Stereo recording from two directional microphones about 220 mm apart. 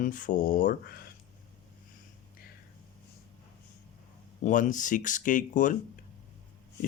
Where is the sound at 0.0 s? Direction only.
35° left (ahead or behind).